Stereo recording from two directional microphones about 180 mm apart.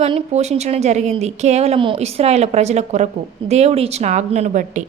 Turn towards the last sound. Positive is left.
turn(degrees=-45)  # may be behind; listen again after turning